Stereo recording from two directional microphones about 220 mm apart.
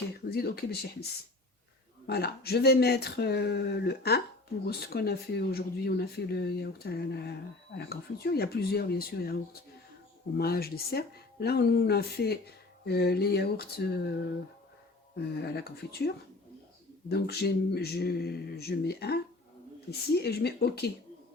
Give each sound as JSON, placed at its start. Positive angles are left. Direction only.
{"t": 0.3, "sound": "speech", "side_deg": 45}
{"t": 2.0, "sound": "speech", "side_deg": 45}
{"t": 15.1, "sound": "speech", "side_deg": 45}